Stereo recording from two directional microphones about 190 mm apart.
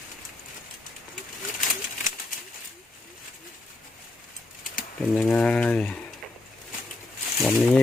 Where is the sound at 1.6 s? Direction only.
45° left (ahead or behind).